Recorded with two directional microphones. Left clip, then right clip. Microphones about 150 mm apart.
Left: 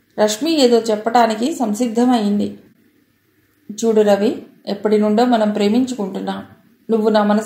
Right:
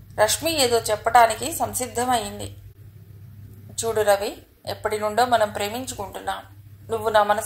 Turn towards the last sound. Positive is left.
turn(degrees=-35)  # may be behind; listen again after turning